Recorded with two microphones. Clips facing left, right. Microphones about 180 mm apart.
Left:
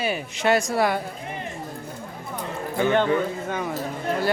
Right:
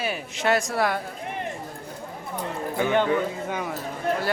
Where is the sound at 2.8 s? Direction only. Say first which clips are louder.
Left 2 dB; 10° right (ahead or behind).